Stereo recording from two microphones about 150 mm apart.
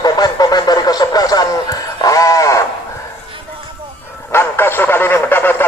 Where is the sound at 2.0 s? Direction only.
25° left (ahead or behind).